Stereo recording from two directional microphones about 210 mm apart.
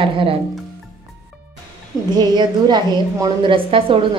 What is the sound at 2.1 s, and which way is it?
A woman's voice, 20° right (ahead or behind).